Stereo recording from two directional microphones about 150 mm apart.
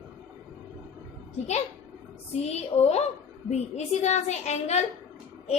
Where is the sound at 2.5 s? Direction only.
45° left (ahead or behind).